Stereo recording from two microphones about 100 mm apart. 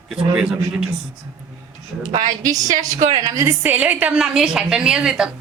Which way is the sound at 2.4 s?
35° right (ahead or behind).